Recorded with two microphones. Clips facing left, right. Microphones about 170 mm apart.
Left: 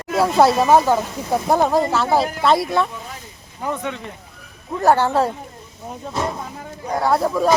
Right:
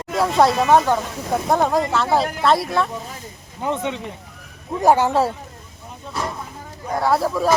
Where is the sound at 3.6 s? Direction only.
20° right (ahead or behind).